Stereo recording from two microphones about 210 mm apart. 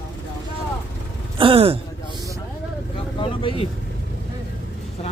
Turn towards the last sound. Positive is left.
turn(degrees=30)  # may be behind; listen again after turning